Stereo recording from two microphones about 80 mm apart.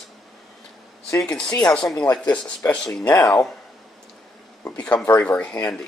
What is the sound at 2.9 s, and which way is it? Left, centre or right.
Speech, left.